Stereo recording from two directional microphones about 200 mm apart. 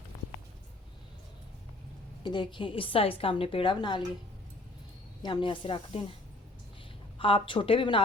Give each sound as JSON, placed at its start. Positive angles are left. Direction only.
{"t": 2.2, "sound": "a woman's voice", "side_deg": 25}
{"t": 5.2, "sound": "a woman's voice", "side_deg": 25}
{"t": 7.2, "sound": "a woman's voice", "side_deg": 25}